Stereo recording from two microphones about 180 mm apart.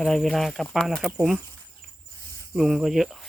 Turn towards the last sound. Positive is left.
turn(degrees=0)  # may be behind; listen again after turning